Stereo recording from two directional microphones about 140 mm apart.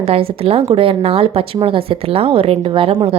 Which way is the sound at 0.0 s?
45° right (ahead or behind).